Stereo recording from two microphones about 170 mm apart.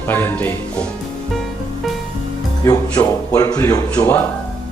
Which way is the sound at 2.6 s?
15° left (ahead or behind).